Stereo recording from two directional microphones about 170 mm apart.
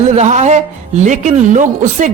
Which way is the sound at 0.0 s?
40° right (ahead or behind).